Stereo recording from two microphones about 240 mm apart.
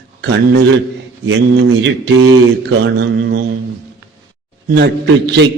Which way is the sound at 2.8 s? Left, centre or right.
Right.